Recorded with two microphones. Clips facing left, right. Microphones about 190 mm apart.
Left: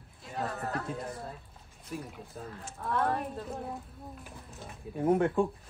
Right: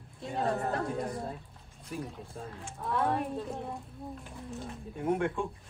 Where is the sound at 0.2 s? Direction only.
25° right (ahead or behind).